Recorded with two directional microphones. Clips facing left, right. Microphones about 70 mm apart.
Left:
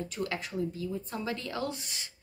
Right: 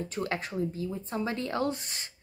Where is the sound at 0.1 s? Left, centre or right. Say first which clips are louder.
Right 2 dB; right.